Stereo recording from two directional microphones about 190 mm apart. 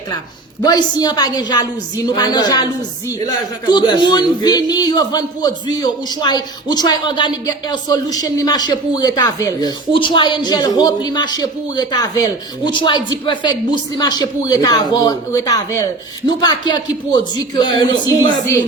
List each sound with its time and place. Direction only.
0.6 s speech: 20° left (ahead or behind)